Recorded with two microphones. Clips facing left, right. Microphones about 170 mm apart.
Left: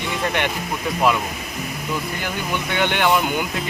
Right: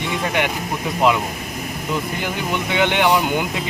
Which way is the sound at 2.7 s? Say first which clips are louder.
Right 2 dB; 15° right (ahead or behind).